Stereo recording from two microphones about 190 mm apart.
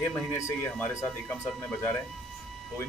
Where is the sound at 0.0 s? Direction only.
15° left (ahead or behind).